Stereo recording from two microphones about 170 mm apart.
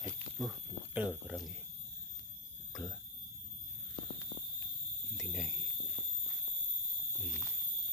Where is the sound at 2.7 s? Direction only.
5° left (ahead or behind).